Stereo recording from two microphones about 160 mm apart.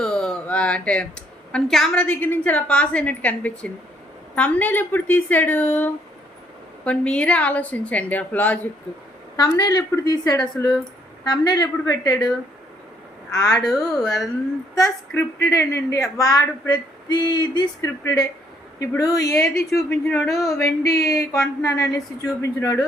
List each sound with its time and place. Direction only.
0.0 s a woman's voice: 5° left (ahead or behind)
9.3 s a woman's voice: 25° left (ahead or behind)
13.3 s a woman's voice: 20° left (ahead or behind)
13.6 s speech: 5° left (ahead or behind)
14.8 s a woman's voice: 20° left (ahead or behind)
19.4 s speech: 5° left (ahead or behind)
20.5 s a woman's voice: 20° left (ahead or behind)